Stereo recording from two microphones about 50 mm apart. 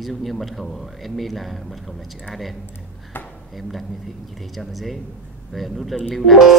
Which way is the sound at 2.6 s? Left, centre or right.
Left.